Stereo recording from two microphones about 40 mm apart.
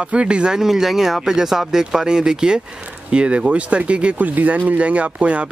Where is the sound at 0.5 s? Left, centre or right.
Centre; by 4.2 s right.